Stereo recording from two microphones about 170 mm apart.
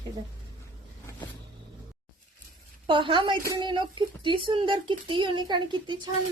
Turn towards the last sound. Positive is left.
turn(degrees=-25)  # may be behind; listen again after turning